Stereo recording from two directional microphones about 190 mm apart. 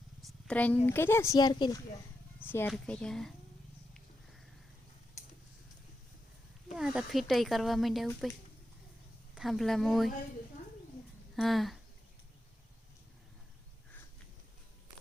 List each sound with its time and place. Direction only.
0.2 s a sound: centre (ahead or behind)
0.9 s speech: 10° left (ahead or behind)
2.4 s speech: 10° left (ahead or behind)
6.7 s speech: centre (ahead or behind)
9.3 s speech: centre (ahead or behind)
11.3 s speech: centre (ahead or behind)